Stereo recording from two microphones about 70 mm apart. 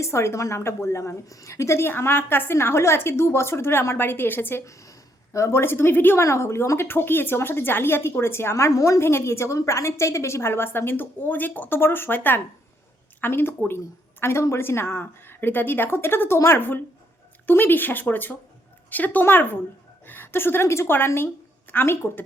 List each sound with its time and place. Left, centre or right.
0.0 s a woman's voice: left
4.6 s a woman's voice: left
6.2 s a woman's voice: left